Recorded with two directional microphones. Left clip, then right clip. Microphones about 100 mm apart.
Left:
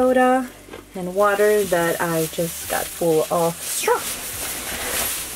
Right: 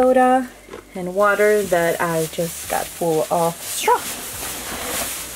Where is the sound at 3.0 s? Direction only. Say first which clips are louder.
Left 2 dB; 20° right (ahead or behind).